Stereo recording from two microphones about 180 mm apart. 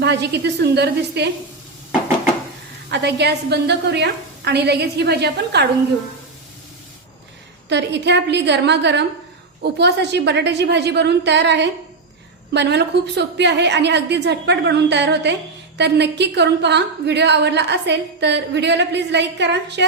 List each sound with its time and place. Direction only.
0.0 s a woman's voice: 70° right (ahead or behind)
2.9 s a woman's voice: 70° right (ahead or behind)
7.7 s a woman's voice: 75° right (ahead or behind)